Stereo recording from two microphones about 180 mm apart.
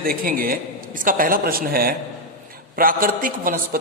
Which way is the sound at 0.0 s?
55° right (ahead or behind).